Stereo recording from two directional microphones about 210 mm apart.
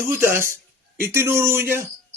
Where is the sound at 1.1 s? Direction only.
10° right (ahead or behind).